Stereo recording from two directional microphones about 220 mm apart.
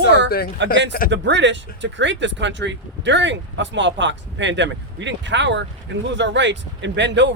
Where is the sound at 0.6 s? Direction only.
55° right (ahead or behind).